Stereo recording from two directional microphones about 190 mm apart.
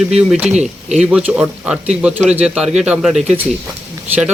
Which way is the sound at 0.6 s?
35° right (ahead or behind).